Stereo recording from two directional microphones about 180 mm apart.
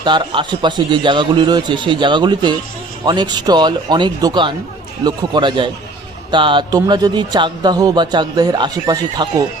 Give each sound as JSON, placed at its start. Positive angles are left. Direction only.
{"t": 0.0, "sound": "a man's voice", "side_deg": -25}